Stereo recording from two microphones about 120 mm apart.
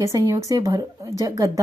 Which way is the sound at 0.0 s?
25° right (ahead or behind).